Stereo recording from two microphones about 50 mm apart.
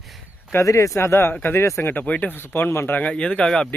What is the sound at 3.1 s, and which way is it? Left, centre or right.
Speech, centre.